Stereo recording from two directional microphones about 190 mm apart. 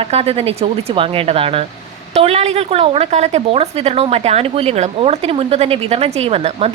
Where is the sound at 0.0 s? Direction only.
30° right (ahead or behind).